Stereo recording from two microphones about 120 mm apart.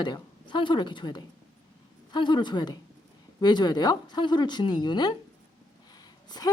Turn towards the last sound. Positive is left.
turn(degrees=35)  # may be behind; listen again after turning